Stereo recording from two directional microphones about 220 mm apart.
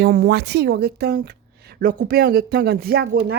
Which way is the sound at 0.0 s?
45° right (ahead or behind).